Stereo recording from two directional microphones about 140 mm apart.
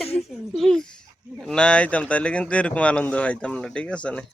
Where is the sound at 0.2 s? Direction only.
Centre (ahead or behind).